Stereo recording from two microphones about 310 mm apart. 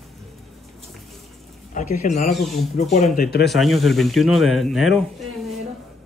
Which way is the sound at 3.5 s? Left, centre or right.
Centre.